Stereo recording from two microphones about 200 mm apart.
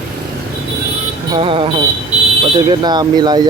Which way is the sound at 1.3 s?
25° right (ahead or behind).